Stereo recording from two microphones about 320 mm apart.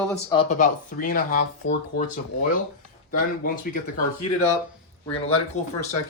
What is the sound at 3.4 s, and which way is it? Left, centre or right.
Speech, left.